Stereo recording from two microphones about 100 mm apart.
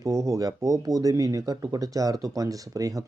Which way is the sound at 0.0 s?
30° right (ahead or behind).